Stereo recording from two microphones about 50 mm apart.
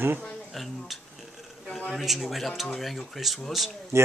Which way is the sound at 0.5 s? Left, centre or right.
Centre.